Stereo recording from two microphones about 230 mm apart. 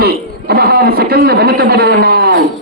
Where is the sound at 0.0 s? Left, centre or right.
Right.